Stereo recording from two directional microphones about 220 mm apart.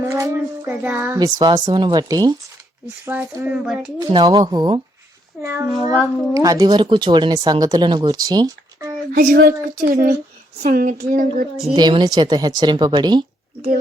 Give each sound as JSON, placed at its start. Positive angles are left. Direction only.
{"t": 0.0, "sound": "speech", "side_deg": -10}
{"t": 4.1, "sound": "a woman's voice", "side_deg": -15}
{"t": 9.1, "sound": "speech", "side_deg": -45}
{"t": 11.7, "sound": "a woman's voice", "side_deg": -20}